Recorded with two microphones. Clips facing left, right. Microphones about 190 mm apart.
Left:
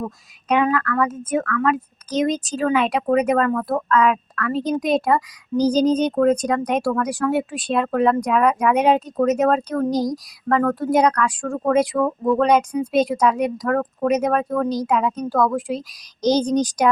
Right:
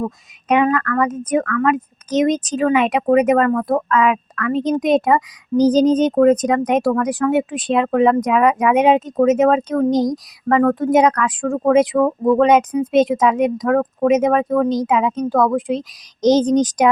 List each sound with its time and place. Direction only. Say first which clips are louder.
0.4 s speech: right 3 dB; centre (ahead or behind)
5.5 s speech: right 4 dB; 20° right (ahead or behind)
6.0 s speech: right 4 dB; centre (ahead or behind)
11.9 s speech: right 4 dB; 20° right (ahead or behind)
12.4 s speech: right 3 dB; centre (ahead or behind)
16.4 s speech: right 4 dB; 20° right (ahead or behind)